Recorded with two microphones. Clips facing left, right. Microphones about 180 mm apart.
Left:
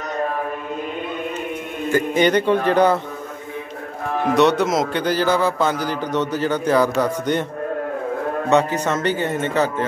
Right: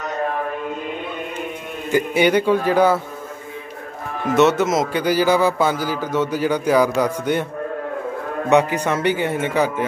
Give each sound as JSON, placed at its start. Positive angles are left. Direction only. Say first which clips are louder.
{"t": 1.9, "sound": "a man's voice", "louder": "even", "side_deg": -10}
{"t": 4.4, "sound": "a man's voice", "louder": "right 2 dB", "side_deg": -5}
{"t": 8.5, "sound": "a man's voice", "louder": "right 2 dB", "side_deg": -15}